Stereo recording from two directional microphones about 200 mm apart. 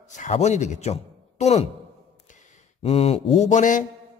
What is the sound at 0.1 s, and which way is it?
Speech, 35° left (ahead or behind).